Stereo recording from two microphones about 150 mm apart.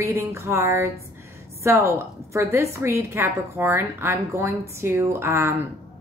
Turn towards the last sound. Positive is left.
turn(degrees=-15)  # may be behind; listen again after turning